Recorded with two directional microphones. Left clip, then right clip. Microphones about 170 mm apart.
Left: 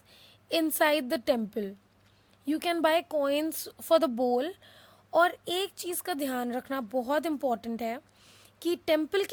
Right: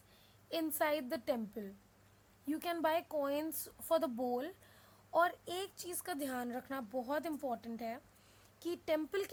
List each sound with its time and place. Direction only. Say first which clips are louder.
0.1 s a woman's voice: left 11 dB; 45° left (ahead or behind)